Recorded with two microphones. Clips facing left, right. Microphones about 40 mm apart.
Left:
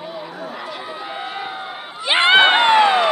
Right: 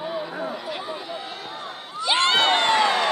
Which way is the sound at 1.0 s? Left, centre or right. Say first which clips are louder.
Left 6 dB; left.